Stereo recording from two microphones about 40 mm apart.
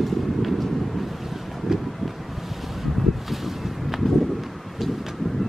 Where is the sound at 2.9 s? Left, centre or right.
Centre.